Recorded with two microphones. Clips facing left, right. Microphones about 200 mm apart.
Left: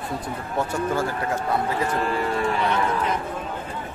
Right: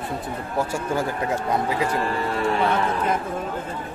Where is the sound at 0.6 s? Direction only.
10° right (ahead or behind).